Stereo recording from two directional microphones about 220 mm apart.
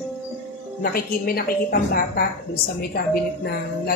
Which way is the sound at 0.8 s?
45° left (ahead or behind).